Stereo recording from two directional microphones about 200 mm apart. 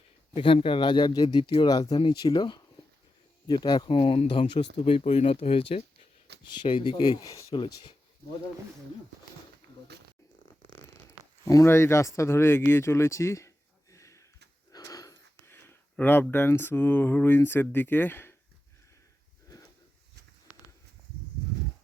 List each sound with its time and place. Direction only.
0.3 s speech: 25° left (ahead or behind)
11.4 s speech: 15° left (ahead or behind)
13.9 s a sound: 15° left (ahead or behind)
14.7 s speech: 20° left (ahead or behind)